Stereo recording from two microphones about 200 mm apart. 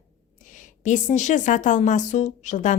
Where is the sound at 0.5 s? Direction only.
40° left (ahead or behind).